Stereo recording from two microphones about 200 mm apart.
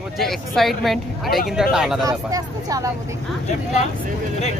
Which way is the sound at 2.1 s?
15° right (ahead or behind).